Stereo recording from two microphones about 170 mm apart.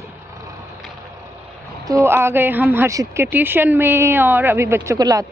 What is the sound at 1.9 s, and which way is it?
A woman's voice, 15° right (ahead or behind).